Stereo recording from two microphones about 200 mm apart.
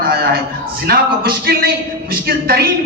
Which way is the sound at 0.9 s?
50° right (ahead or behind).